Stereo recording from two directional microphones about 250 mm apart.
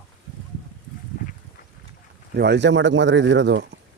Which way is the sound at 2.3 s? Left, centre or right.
Right.